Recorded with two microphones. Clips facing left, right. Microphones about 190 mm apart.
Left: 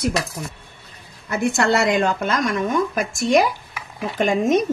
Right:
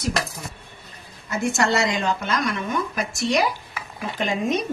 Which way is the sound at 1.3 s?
60° left (ahead or behind).